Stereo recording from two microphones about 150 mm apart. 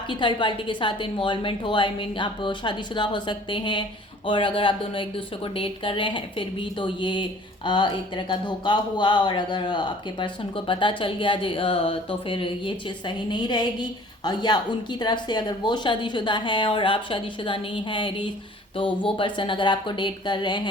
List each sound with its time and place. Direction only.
0.1 s speech: 30° left (ahead or behind)